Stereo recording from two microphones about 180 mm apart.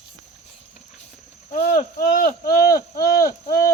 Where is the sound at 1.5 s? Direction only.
55° left (ahead or behind).